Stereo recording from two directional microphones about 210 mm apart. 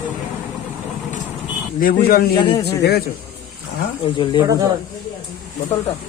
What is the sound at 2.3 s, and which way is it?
Speech, 20° left (ahead or behind).